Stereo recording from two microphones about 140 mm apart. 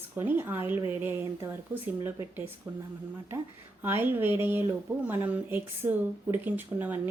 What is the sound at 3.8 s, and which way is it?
Speech, 15° right (ahead or behind).